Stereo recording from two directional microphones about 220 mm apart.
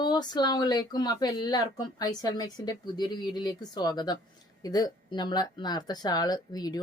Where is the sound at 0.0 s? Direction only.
20° left (ahead or behind).